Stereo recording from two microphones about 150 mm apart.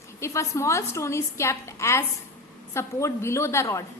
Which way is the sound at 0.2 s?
20° left (ahead or behind).